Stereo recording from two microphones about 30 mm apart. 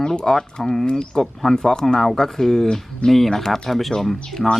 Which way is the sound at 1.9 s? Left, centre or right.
Centre.